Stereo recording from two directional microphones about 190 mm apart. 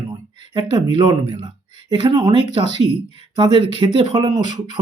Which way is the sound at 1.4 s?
20° right (ahead or behind).